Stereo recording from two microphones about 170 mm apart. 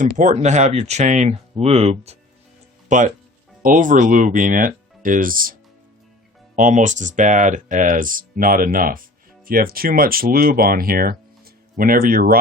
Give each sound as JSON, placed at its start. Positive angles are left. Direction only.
{"t": 0.0, "sound": "speech", "side_deg": -45}
{"t": 2.9, "sound": "speech", "side_deg": -45}
{"t": 6.6, "sound": "speech", "side_deg": -50}